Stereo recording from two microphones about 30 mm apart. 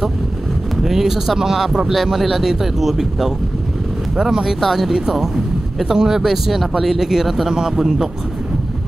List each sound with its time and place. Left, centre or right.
0.8 s speech: centre
4.6 s speech: centre
5.9 s speech: centre
6.2 s speech: centre